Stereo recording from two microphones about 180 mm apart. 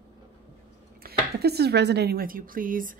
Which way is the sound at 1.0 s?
60° right (ahead or behind).